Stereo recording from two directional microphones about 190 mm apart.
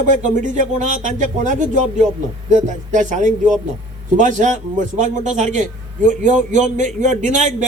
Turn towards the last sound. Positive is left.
turn(degrees=-40)  # may be behind; listen again after turning